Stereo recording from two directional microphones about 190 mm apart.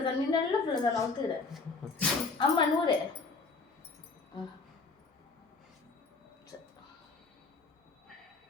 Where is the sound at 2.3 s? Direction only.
25° left (ahead or behind).